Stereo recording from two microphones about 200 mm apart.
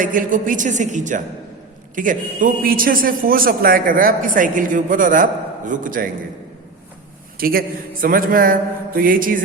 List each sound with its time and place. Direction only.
0.0 s a woman's voice: 45° right (ahead or behind)
7.3 s a man's voice: 45° right (ahead or behind)